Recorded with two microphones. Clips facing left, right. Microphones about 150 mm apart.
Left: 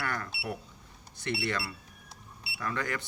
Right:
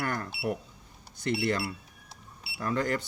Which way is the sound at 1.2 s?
45° right (ahead or behind).